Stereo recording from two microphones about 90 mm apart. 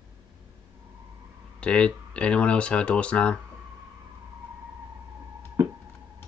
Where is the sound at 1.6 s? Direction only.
10° left (ahead or behind).